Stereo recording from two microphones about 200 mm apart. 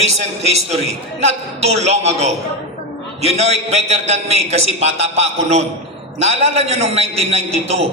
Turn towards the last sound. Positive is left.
turn(degrees=-30)  # may be behind; listen again after turning